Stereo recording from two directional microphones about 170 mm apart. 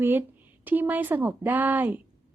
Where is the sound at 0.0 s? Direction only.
10° right (ahead or behind).